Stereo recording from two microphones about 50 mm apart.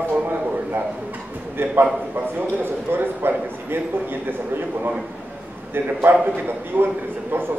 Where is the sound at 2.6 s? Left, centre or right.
Right.